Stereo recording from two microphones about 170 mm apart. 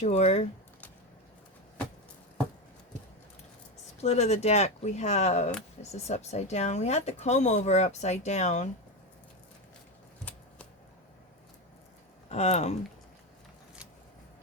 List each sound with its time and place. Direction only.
0.0 s speech: 40° left (ahead or behind)
4.0 s speech: 40° left (ahead or behind)
12.3 s speech: 40° left (ahead or behind)